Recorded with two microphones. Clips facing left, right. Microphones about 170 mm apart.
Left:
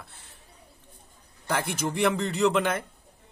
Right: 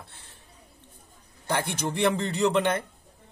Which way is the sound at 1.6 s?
Centre (ahead or behind).